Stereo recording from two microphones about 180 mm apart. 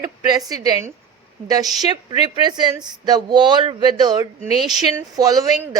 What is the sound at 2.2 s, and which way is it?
Speech, 25° right (ahead or behind).